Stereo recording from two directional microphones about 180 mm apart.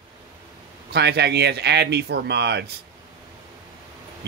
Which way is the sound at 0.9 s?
65° right (ahead or behind).